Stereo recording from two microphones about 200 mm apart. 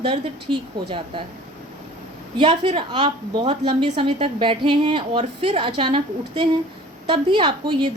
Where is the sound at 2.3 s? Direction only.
25° right (ahead or behind).